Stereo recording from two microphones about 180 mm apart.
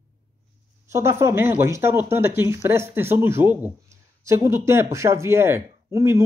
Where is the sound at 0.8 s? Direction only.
15° right (ahead or behind).